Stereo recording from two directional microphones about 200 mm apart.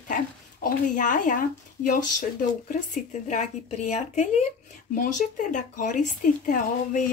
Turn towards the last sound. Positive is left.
turn(degrees=40)  # may be behind; listen again after turning